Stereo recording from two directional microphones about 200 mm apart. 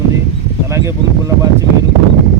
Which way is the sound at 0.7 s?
15° right (ahead or behind).